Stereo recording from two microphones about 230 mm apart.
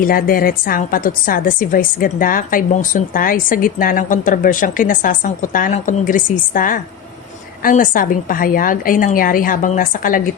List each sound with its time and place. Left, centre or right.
0.0 s a woman's voice: left